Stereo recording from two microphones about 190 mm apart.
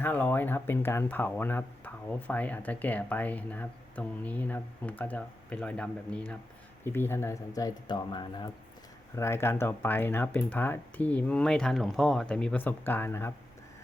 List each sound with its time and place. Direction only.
0.0 s speech: 10° left (ahead or behind)